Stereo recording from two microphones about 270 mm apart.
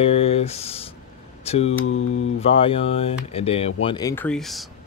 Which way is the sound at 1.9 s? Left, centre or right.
Left.